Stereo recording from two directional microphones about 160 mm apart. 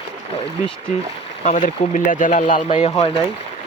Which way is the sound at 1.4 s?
50° left (ahead or behind).